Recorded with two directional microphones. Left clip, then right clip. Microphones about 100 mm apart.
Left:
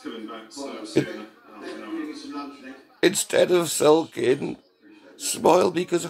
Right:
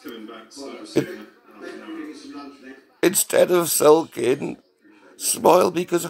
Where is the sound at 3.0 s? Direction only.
20° right (ahead or behind).